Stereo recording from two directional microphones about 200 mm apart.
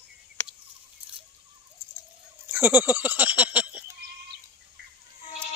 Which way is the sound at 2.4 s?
10° right (ahead or behind).